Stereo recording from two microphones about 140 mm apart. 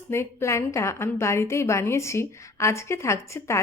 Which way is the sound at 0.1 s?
20° left (ahead or behind).